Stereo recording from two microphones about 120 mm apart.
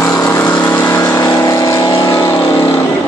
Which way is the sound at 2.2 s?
25° left (ahead or behind).